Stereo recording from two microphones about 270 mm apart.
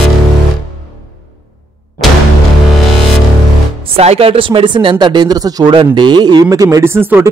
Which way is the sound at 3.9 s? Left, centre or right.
Right.